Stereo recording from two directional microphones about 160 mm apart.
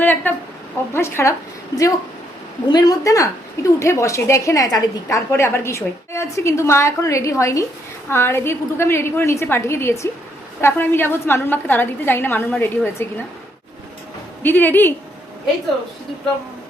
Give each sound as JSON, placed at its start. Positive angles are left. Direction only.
{"t": 0.0, "sound": "a woman's voice", "side_deg": 10}
{"t": 14.4, "sound": "a woman's voice", "side_deg": 10}